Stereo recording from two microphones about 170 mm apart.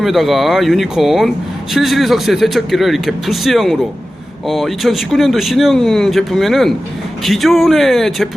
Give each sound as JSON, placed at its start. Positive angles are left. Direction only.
{"t": 0.0, "sound": "speech", "side_deg": 0}